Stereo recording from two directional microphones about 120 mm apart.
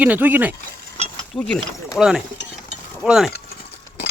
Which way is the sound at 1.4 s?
5° left (ahead or behind).